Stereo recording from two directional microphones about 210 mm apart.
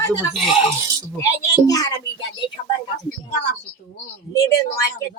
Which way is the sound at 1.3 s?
15° left (ahead or behind).